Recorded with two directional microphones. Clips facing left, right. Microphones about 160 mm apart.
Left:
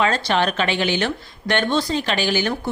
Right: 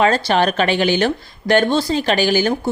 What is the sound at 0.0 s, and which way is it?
Speech, 35° right (ahead or behind).